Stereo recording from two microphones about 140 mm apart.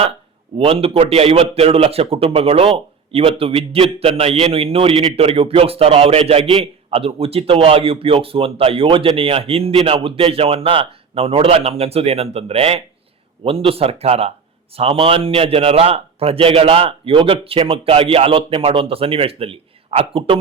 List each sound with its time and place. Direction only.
0.6 s speech: 40° right (ahead or behind)